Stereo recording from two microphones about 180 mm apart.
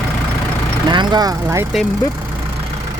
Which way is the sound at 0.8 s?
25° right (ahead or behind).